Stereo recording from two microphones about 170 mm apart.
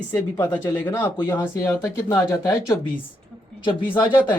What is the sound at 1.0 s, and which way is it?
Speech, 25° left (ahead or behind).